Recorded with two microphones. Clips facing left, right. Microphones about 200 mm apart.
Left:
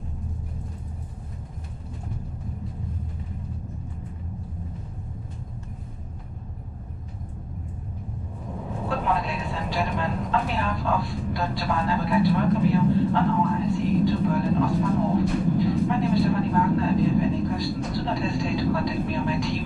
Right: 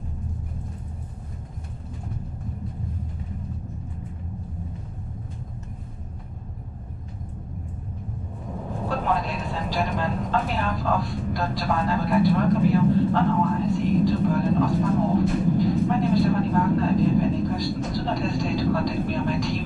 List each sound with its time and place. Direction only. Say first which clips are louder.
8.6 s speech: right 1 dB; centre (ahead or behind)